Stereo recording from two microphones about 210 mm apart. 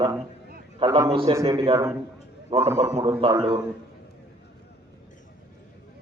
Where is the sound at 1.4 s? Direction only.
15° right (ahead or behind).